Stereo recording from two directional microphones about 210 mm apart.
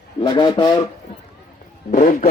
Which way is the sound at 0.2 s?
20° left (ahead or behind).